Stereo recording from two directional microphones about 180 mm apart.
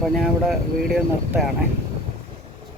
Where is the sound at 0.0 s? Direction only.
Centre (ahead or behind).